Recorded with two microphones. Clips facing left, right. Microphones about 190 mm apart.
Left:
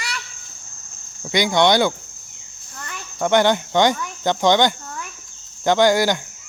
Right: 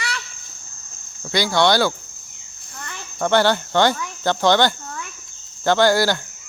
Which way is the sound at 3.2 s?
15° left (ahead or behind).